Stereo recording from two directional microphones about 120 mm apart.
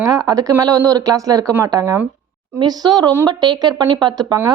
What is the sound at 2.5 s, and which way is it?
Speech, 35° right (ahead or behind).